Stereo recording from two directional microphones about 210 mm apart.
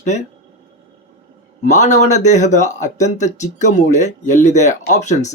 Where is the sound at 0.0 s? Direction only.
35° left (ahead or behind).